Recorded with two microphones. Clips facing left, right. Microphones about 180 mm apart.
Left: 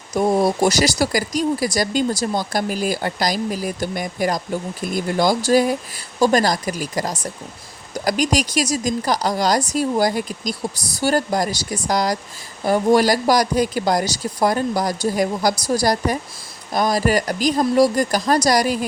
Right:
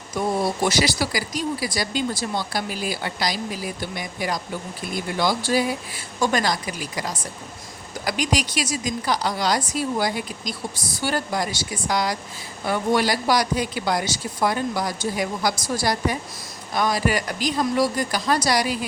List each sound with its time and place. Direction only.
0.1 s speech: 45° left (ahead or behind)